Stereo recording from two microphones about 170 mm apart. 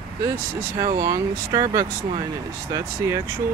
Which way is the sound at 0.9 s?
20° right (ahead or behind).